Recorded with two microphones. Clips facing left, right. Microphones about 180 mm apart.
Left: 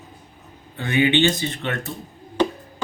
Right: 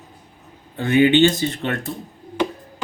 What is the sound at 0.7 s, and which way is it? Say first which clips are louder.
Speech: right 4 dB; 45° right (ahead or behind).